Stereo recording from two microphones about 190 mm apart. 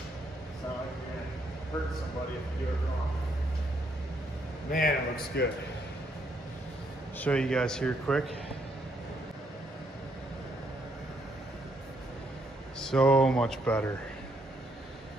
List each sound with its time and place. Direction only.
4.6 s a man's voice: 50° left (ahead or behind)
7.2 s speech: 5° left (ahead or behind)
12.8 s speech: 5° left (ahead or behind)